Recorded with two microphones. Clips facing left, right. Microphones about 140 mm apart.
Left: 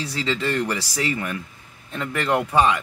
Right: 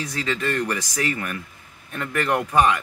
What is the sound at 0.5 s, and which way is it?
Speech, 15° left (ahead or behind).